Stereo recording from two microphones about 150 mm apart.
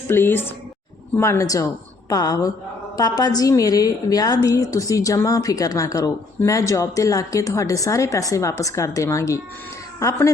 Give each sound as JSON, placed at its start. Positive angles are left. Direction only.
{"t": 0.1, "sound": "a woman's voice", "side_deg": 15}